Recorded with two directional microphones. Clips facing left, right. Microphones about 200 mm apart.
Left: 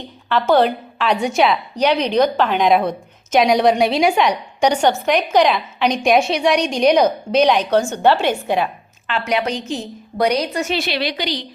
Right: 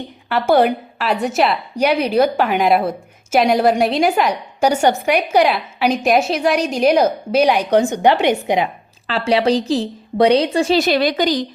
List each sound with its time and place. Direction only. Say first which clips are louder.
0.3 s a woman's voice: right 1 dB; 10° right (ahead or behind)
9.0 s a woman's voice: right 5 dB; 35° right (ahead or behind)